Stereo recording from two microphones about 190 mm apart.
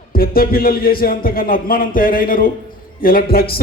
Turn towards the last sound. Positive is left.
turn(degrees=50)  # may be behind; listen again after turning